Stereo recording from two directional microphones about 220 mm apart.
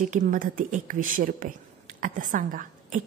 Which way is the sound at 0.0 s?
35° right (ahead or behind).